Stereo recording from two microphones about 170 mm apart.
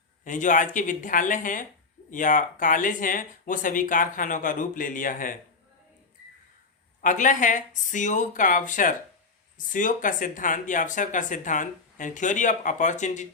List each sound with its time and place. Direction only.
0.3 s speech: 50° left (ahead or behind)
7.0 s speech: 50° left (ahead or behind)